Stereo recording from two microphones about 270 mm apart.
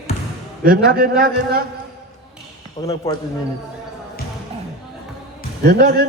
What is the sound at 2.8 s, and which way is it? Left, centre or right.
Speech, centre.